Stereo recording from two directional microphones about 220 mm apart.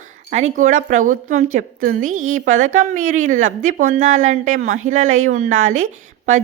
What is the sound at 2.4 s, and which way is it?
A woman's voice, 35° right (ahead or behind).